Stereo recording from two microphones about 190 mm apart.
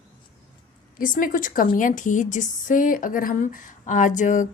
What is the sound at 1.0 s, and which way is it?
A woman's voice, 45° left (ahead or behind).